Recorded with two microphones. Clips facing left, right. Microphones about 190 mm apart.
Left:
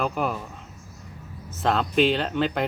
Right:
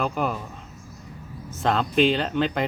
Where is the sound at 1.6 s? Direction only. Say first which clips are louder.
Right 1 dB; centre (ahead or behind).